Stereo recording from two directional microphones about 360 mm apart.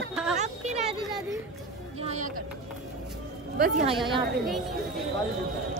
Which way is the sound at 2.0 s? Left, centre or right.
Centre.